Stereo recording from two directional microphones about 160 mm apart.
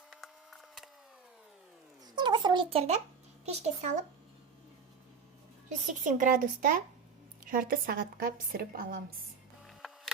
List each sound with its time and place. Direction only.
0.1 s splinter: centre (ahead or behind)
2.1 s a child's voice: 30° right (ahead or behind); by 4.0 s 50° right (ahead or behind)
5.6 s speech: 50° right (ahead or behind)